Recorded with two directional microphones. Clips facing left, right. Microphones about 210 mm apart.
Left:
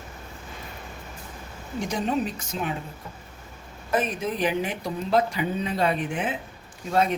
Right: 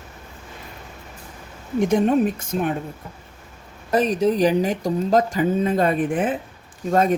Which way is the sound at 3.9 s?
40° right (ahead or behind).